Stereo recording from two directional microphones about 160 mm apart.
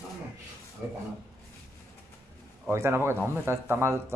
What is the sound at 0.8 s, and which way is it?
Speech, 5° right (ahead or behind).